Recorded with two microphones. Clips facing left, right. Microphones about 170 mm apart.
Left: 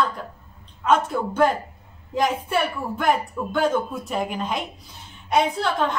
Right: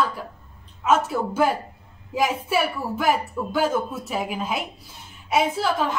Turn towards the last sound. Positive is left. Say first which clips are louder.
# even
turn(degrees=-5)  # may be behind; listen again after turning